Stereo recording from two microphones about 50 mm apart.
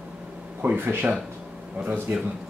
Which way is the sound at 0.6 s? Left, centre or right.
Right.